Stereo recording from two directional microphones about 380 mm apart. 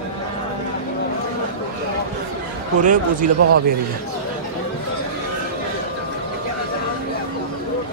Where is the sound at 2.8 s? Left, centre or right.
Right.